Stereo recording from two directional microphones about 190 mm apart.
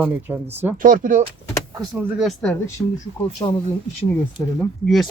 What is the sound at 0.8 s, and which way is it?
Speech, 45° right (ahead or behind).